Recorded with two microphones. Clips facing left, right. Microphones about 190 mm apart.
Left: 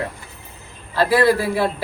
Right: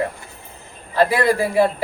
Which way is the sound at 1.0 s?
15° right (ahead or behind).